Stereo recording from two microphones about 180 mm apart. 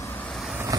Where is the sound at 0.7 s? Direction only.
20° right (ahead or behind).